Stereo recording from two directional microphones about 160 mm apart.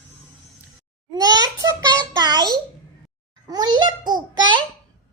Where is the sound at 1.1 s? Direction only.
25° right (ahead or behind).